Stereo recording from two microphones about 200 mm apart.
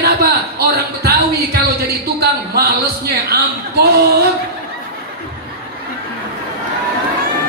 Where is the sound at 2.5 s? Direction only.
50° right (ahead or behind).